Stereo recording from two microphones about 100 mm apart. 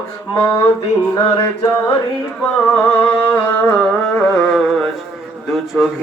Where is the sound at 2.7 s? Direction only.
20° left (ahead or behind).